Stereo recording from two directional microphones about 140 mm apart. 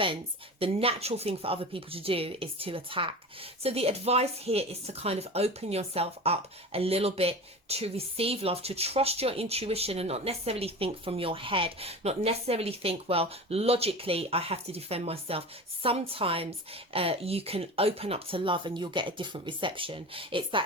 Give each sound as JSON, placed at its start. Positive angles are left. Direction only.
{"t": 0.6, "sound": "a woman's voice", "side_deg": -45}